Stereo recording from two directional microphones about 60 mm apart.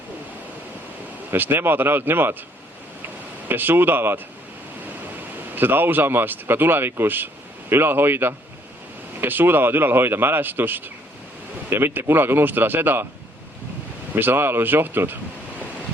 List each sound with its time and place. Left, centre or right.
1.3 s speech: right
3.5 s speech: right
5.5 s speech: right
14.1 s speech: right